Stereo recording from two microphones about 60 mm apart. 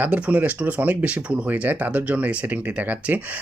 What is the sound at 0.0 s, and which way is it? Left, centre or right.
Speech, right.